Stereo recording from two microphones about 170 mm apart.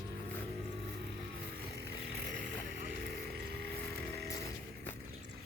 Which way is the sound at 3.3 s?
70° right (ahead or behind).